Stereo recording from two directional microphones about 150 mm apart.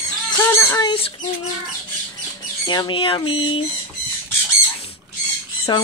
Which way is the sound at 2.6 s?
30° left (ahead or behind).